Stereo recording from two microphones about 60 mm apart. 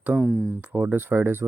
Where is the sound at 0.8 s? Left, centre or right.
Right.